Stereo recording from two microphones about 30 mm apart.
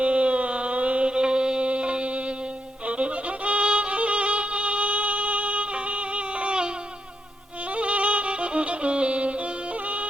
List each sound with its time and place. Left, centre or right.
0.0 s a sound: right
1.0 s mantra: right
2.8 s music: right
7.7 s music: right